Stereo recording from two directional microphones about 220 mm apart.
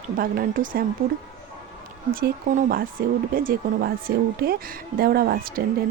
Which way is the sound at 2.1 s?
40° right (ahead or behind).